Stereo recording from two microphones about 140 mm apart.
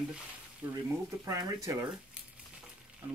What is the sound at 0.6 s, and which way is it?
Speech, 25° right (ahead or behind).